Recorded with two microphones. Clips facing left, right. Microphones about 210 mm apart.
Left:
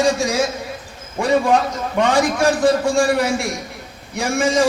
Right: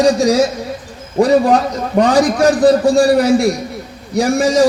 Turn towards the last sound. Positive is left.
turn(degrees=-35)  # may be behind; listen again after turning